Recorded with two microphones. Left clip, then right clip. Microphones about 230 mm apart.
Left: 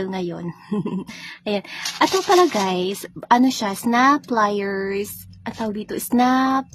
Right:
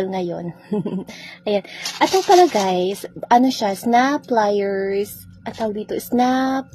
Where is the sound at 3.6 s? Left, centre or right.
Left.